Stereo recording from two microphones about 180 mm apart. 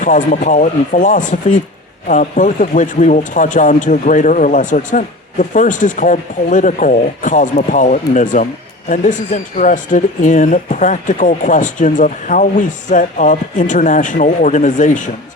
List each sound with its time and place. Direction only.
0.0 s speech: 45° left (ahead or behind)